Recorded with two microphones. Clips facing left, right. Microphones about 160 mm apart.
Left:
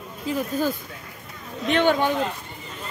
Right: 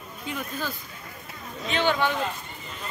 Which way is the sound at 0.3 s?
40° left (ahead or behind).